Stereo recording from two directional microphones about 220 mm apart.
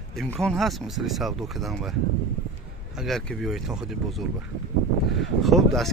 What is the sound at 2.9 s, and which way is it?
Speech, centre (ahead or behind).